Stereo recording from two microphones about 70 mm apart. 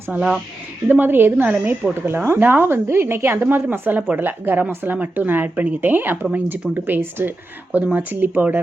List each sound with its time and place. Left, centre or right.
0.1 s speech: centre
0.9 s speech: right